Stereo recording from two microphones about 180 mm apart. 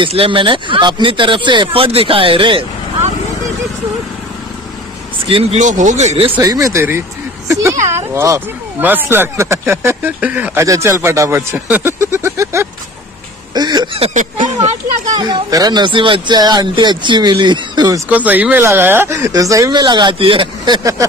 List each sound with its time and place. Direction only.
0.0 s speech: 30° right (ahead or behind)
5.2 s speech: 30° right (ahead or behind)
6.3 s speech: 20° right (ahead or behind); by 14.7 s 40° right (ahead or behind)
15.0 s speech: 20° right (ahead or behind)